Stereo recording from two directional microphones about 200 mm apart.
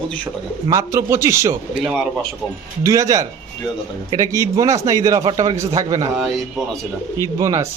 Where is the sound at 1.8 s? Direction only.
Centre (ahead or behind).